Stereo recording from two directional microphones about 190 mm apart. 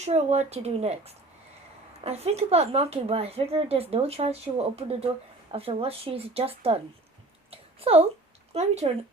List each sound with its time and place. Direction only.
0.0 s a woman's voice: 35° right (ahead or behind)
7.5 s a sound: 30° right (ahead or behind)
8.5 s a woman's voice: 35° right (ahead or behind)